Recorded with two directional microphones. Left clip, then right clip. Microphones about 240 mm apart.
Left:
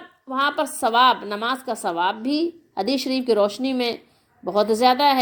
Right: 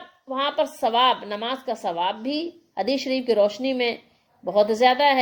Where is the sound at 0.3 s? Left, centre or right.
Centre.